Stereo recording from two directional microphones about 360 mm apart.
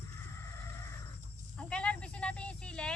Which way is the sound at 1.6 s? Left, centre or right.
Centre.